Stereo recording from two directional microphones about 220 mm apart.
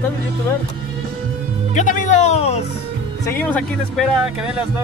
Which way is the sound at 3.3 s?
10° left (ahead or behind).